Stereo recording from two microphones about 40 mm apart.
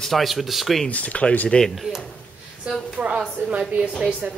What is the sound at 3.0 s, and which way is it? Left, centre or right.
Speech, right.